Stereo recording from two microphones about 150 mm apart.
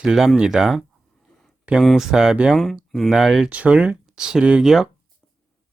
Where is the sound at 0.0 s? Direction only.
5° right (ahead or behind).